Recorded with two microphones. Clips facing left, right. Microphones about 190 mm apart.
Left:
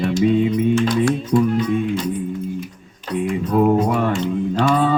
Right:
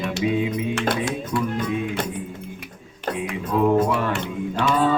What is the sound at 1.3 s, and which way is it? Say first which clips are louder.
Music: left 7 dB; 50° right (ahead or behind).